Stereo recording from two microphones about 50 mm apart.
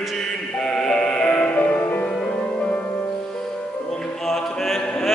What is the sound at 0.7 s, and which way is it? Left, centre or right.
Music, centre.